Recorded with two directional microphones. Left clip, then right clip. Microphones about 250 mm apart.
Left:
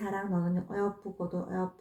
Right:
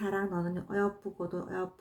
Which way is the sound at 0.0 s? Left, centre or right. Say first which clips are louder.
Right 1 dB; right.